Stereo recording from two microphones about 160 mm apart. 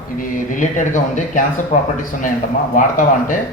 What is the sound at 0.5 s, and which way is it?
Speech, 55° left (ahead or behind).